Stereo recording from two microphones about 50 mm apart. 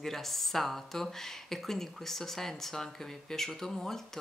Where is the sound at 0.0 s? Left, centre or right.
Centre.